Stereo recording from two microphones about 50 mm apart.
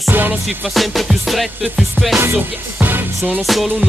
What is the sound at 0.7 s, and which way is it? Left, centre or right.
Music, centre.